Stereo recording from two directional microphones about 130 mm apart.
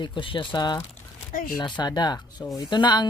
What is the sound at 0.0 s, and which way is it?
Speech, 40° left (ahead or behind).